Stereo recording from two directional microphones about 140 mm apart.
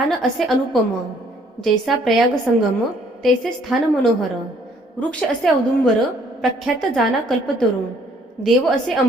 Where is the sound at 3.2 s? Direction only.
5° left (ahead or behind).